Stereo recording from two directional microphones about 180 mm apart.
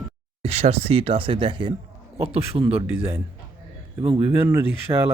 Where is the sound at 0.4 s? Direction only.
35° right (ahead or behind).